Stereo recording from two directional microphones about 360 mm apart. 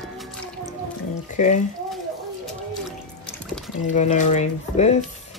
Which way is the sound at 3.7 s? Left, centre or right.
Centre.